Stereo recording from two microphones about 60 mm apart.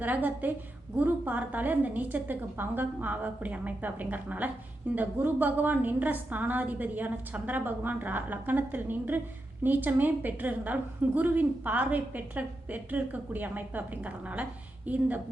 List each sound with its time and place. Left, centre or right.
0.0 s a woman's voice: right